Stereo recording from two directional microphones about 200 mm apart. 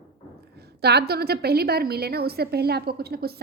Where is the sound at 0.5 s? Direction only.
55° right (ahead or behind).